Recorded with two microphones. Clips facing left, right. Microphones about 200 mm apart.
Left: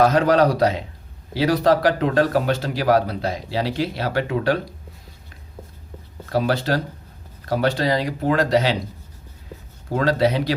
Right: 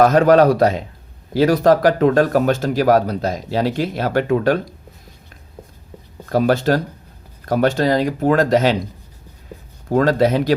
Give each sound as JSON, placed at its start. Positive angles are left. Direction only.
{"t": 0.0, "sound": "speech", "side_deg": -50}
{"t": 6.2, "sound": "speech", "side_deg": -50}
{"t": 9.9, "sound": "speech", "side_deg": -50}